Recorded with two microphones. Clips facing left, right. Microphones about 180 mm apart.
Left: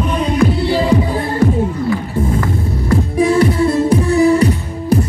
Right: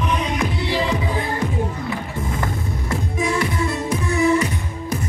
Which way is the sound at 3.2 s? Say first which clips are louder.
Left 10 dB; 30° left (ahead or behind).